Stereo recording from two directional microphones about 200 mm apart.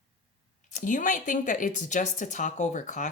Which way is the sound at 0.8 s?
40° left (ahead or behind).